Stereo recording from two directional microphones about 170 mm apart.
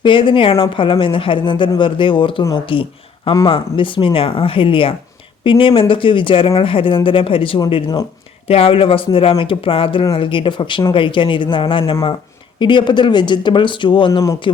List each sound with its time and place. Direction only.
0.0 s speech: 30° left (ahead or behind)